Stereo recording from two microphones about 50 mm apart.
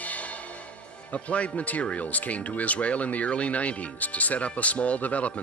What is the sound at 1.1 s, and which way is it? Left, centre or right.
Speech, left.